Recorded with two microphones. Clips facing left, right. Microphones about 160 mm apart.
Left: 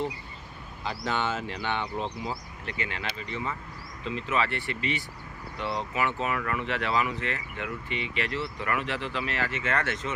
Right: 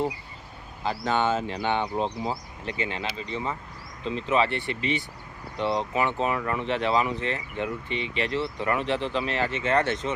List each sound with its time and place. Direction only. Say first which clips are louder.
0.9 s speech: right 5 dB; 45° right (ahead or behind)
1.4 s speech: right 5 dB; 30° right (ahead or behind)